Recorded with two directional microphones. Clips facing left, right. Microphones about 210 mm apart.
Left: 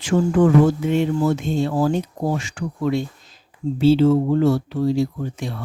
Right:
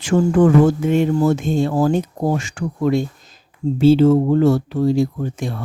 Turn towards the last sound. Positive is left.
turn(degrees=-50)  # may be behind; listen again after turning